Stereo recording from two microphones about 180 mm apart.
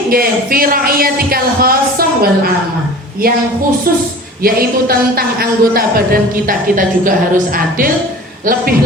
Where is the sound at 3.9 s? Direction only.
55° right (ahead or behind).